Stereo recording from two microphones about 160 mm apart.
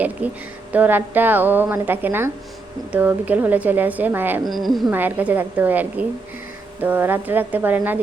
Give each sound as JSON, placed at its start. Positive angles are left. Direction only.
{"t": 0.2, "sound": "a woman's voice", "side_deg": -10}
{"t": 4.4, "sound": "speech", "side_deg": 0}
{"t": 4.9, "sound": "a woman's voice", "side_deg": -10}